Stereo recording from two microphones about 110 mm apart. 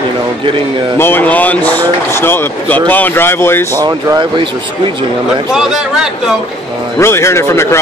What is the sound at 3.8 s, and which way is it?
Speech, 35° right (ahead or behind).